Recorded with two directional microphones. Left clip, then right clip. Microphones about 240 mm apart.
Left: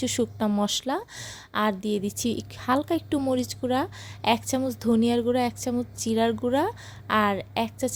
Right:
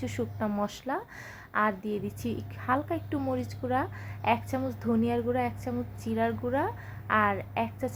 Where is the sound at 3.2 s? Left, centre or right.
Left.